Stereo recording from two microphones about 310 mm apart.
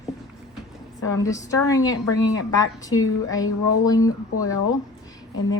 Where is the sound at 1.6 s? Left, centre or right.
Centre.